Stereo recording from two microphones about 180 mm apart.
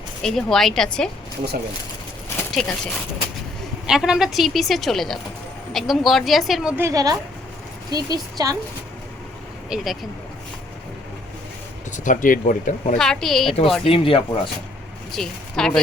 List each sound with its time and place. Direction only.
0.2 s a woman's voice: centre (ahead or behind)
2.3 s a sound: 10° left (ahead or behind)
3.8 s a woman's voice: 5° right (ahead or behind)
6.8 s a woman's voice: 20° right (ahead or behind)
9.6 s a woman's voice: centre (ahead or behind)
11.9 s speech: 45° left (ahead or behind)
13.0 s a woman's voice: 5° left (ahead or behind)
13.8 s speech: 30° left (ahead or behind)
15.1 s speech: centre (ahead or behind)